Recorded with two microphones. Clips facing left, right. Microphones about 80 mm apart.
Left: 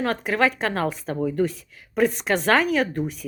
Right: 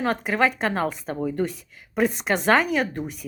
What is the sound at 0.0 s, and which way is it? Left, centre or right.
A woman's voice, centre.